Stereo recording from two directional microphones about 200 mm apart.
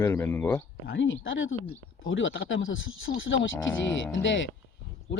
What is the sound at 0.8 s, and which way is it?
Speech, 65° left (ahead or behind).